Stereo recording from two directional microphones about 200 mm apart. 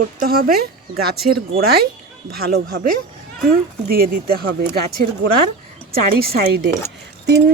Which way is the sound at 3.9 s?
50° right (ahead or behind).